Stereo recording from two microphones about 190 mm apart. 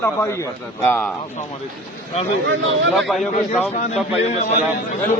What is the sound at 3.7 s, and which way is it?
Speech, 35° left (ahead or behind).